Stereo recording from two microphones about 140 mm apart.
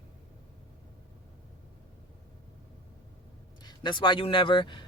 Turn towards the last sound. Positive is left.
turn(degrees=35)  # may be behind; listen again after turning